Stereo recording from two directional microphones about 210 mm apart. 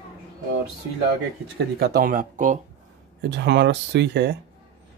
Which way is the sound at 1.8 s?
45° right (ahead or behind).